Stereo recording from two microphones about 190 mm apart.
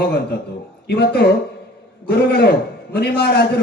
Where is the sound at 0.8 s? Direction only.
60° left (ahead or behind).